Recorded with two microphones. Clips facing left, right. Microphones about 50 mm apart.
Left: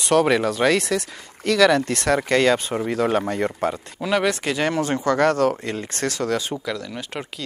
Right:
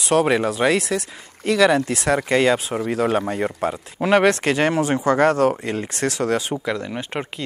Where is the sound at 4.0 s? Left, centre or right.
Right.